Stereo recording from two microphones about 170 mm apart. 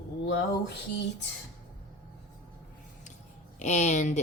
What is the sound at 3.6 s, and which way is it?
Speech, 45° left (ahead or behind).